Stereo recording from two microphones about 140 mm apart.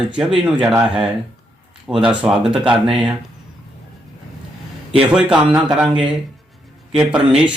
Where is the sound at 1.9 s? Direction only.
5° right (ahead or behind).